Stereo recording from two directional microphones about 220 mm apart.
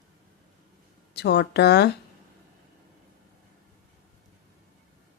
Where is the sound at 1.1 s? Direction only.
50° left (ahead or behind).